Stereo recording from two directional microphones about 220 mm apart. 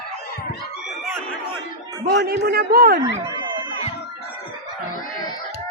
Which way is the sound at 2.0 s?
45° right (ahead or behind).